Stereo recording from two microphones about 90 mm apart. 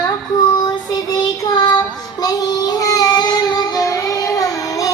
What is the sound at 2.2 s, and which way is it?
Child singing, 45° left (ahead or behind).